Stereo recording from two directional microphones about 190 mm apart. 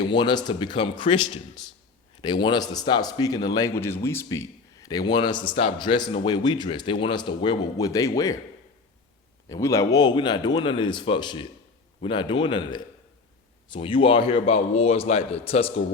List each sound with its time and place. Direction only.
0.1 s a man's voice: 25° left (ahead or behind)
9.5 s a man's voice: 15° left (ahead or behind); by 15.8 s 30° left (ahead or behind)